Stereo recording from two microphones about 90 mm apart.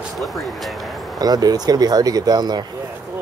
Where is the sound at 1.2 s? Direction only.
45° right (ahead or behind).